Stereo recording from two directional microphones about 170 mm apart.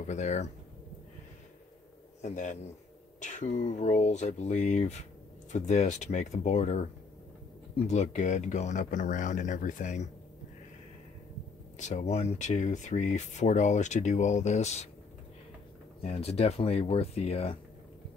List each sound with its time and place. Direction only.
0.0 s speech: 45° left (ahead or behind)
2.2 s speech: 45° left (ahead or behind)
11.8 s speech: 45° left (ahead or behind)
16.0 s speech: 35° left (ahead or behind)